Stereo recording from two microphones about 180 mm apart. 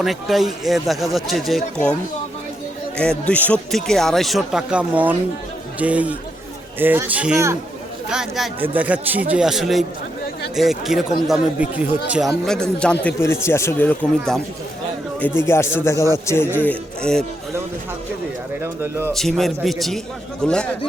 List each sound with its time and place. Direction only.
0.0 s speech: centre (ahead or behind)
3.0 s a man's voice: 5° left (ahead or behind)
18.6 s speech: 15° right (ahead or behind)
19.1 s speech: centre (ahead or behind)